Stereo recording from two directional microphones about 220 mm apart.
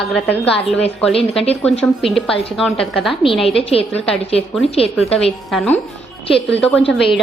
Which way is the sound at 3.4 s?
25° left (ahead or behind).